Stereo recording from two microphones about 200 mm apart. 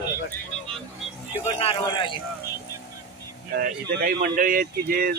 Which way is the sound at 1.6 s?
25° left (ahead or behind).